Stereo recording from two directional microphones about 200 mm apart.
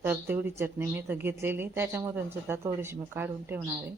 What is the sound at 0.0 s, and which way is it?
Speech, 10° right (ahead or behind).